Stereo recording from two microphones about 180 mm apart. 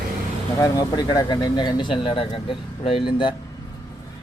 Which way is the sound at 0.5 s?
20° left (ahead or behind).